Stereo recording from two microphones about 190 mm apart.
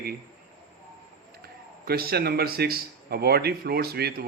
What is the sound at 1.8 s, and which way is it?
Speech, 55° right (ahead or behind).